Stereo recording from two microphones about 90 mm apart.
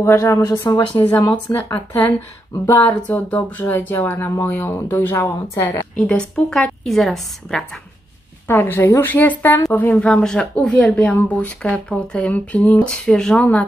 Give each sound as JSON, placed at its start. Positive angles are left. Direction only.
{"t": 0.0, "sound": "speech", "side_deg": 30}
{"t": 1.0, "sound": "speech", "side_deg": 45}
{"t": 2.6, "sound": "speech", "side_deg": 20}
{"t": 8.5, "sound": "speech", "side_deg": 25}